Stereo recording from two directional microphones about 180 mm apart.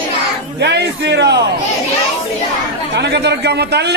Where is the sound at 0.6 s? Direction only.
70° right (ahead or behind).